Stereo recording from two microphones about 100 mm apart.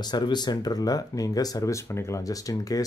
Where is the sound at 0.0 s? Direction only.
45° left (ahead or behind).